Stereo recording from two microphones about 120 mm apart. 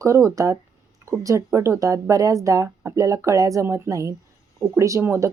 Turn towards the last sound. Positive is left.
turn(degrees=-25)  # may be behind; listen again after turning